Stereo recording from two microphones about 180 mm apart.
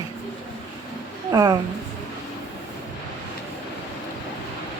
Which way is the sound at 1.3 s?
20° right (ahead or behind).